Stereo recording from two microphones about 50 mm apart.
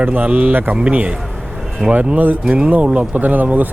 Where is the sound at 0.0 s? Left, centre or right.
Right.